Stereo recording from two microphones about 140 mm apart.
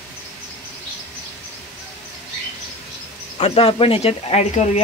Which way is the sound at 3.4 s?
45° left (ahead or behind).